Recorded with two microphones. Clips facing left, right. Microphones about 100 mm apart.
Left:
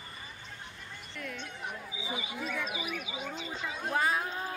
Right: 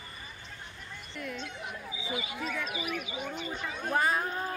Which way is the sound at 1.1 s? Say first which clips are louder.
Right 3 dB; 5° right (ahead or behind).